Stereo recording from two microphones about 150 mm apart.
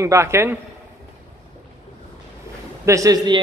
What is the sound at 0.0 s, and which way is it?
Speech, 20° right (ahead or behind).